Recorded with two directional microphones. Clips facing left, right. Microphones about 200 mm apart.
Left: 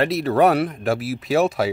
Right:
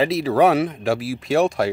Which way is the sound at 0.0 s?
Centre (ahead or behind).